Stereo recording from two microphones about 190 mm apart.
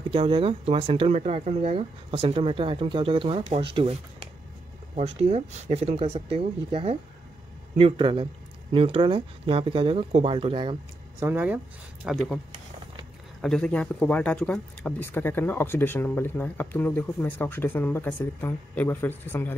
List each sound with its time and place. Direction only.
0.1 s speech: 30° right (ahead or behind)
11.1 s speech: 10° right (ahead or behind)
13.4 s speech: 5° left (ahead or behind)